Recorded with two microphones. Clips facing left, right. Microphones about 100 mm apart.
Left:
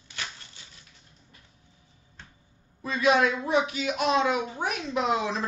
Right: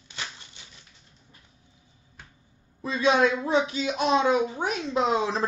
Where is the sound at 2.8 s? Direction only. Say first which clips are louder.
Right 1 dB; 30° right (ahead or behind).